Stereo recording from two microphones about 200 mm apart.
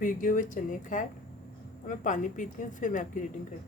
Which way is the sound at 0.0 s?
40° left (ahead or behind).